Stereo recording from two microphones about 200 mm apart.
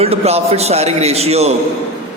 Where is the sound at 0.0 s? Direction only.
30° right (ahead or behind).